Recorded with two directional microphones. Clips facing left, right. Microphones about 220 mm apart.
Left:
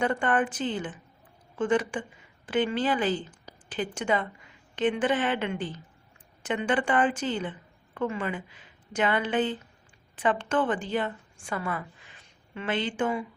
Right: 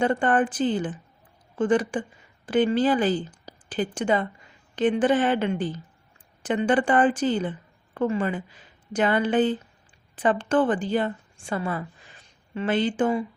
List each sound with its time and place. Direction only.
0.0 s a woman's voice: 30° right (ahead or behind)